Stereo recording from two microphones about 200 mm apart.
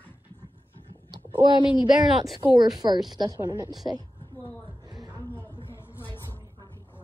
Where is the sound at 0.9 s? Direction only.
25° right (ahead or behind).